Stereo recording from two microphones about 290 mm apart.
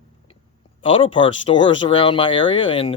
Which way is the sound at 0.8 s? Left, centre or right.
Centre.